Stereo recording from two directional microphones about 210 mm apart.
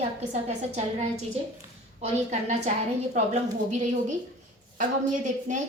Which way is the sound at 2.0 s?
35° right (ahead or behind).